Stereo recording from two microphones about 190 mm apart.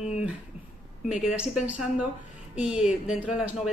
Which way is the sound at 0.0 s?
5° right (ahead or behind).